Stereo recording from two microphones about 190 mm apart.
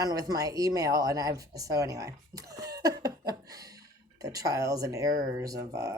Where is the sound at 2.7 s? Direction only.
20° right (ahead or behind).